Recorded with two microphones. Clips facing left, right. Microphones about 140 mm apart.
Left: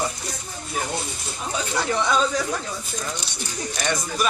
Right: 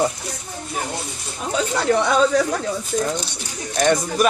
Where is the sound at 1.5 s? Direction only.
60° right (ahead or behind).